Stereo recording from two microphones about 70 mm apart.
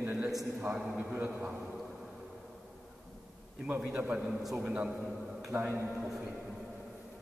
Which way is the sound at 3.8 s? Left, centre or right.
Right.